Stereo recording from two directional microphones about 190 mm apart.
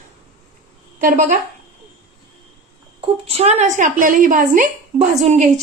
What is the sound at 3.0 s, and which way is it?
A woman's voice, 30° right (ahead or behind).